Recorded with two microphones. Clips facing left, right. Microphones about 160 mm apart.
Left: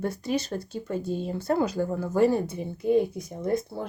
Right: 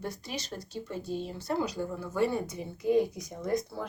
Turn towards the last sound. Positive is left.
turn(degrees=25)  # may be behind; listen again after turning